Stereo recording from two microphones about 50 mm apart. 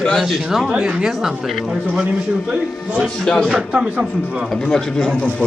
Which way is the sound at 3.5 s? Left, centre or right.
Centre.